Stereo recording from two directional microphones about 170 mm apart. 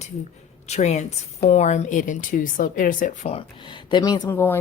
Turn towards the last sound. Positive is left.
turn(degrees=15)  # may be behind; listen again after turning